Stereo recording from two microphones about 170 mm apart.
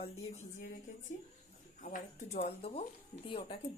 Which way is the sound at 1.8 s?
50° left (ahead or behind).